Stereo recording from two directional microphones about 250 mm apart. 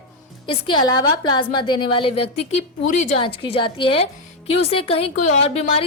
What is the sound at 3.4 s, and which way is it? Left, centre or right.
A woman's voice, left.